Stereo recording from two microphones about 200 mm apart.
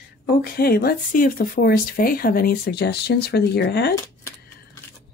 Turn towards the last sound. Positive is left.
turn(degrees=55)  # may be behind; listen again after turning